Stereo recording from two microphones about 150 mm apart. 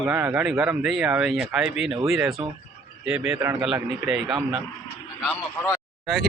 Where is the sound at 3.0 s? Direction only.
5° right (ahead or behind).